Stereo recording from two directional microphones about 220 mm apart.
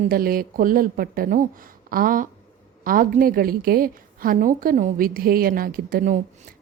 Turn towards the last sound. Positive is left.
turn(degrees=-40)  # may be behind; listen again after turning